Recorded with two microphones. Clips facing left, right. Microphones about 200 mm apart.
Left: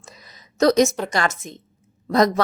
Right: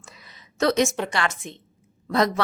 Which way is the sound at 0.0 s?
40° left (ahead or behind).